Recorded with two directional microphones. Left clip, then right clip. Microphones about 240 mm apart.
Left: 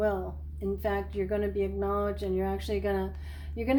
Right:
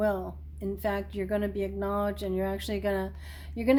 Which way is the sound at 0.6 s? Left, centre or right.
Right.